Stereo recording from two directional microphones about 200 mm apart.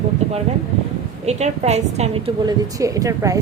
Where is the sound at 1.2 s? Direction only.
35° right (ahead or behind).